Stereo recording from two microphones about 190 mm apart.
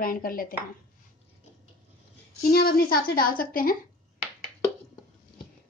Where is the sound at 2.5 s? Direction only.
55° left (ahead or behind).